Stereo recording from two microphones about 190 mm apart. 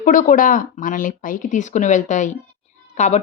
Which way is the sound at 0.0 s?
45° left (ahead or behind).